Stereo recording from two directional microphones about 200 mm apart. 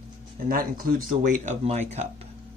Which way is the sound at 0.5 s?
45° right (ahead or behind).